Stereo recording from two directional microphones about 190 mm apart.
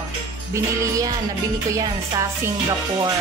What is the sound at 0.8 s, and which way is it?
Speech, 20° right (ahead or behind).